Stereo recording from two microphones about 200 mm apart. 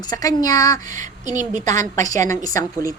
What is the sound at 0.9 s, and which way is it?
Speech, 40° right (ahead or behind).